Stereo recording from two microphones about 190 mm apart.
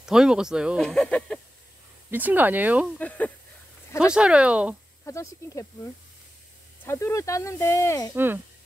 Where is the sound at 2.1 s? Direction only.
10° right (ahead or behind).